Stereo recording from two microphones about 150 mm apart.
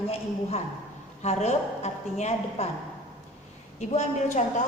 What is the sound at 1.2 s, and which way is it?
A woman's voice, 50° left (ahead or behind).